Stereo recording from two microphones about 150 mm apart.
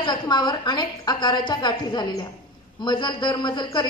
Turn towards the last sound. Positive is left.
turn(degrees=30)  # may be behind; listen again after turning